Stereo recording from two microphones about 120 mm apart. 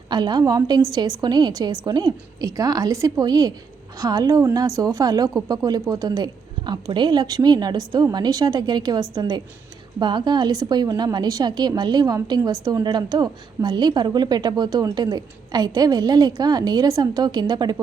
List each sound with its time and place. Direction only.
0.1 s a woman's voice: 35° right (ahead or behind)